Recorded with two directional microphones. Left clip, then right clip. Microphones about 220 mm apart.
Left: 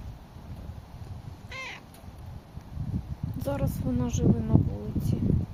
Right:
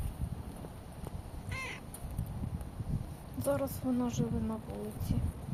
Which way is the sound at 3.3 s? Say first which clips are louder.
Left 1 dB; 30° left (ahead or behind).